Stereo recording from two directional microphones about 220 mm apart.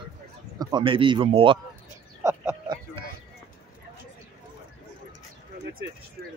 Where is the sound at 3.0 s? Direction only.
25° right (ahead or behind).